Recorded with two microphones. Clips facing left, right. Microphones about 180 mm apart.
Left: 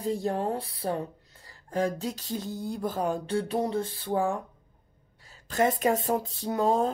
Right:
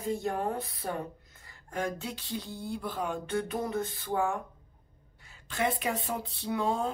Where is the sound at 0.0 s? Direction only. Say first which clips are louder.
Left 3 dB; 35° left (ahead or behind).